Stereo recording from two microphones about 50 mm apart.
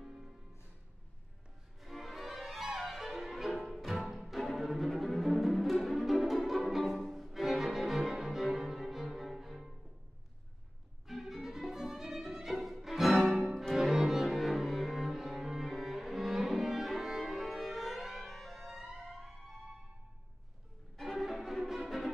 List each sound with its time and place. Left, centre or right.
0.0 s music: centre
1.8 s music: centre
7.1 s cello: centre
11.1 s violin: centre
13.3 s music: centre
13.7 s cello: centre
18.3 s music: centre
20.9 s music: centre